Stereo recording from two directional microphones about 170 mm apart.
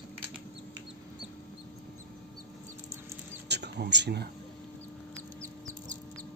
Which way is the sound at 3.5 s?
80° right.